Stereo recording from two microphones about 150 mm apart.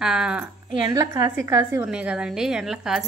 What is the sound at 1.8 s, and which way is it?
A woman's voice, 5° right (ahead or behind).